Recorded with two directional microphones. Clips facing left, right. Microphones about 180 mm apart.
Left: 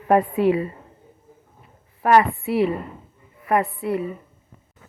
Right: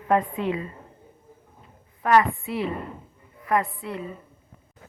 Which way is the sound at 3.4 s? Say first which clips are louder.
Left 4 dB; 30° left (ahead or behind).